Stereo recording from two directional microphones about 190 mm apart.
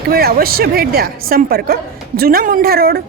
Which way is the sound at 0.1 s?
55° right (ahead or behind).